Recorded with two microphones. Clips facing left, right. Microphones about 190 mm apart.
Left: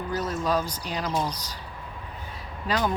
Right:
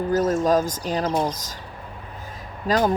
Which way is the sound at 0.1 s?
45° right (ahead or behind).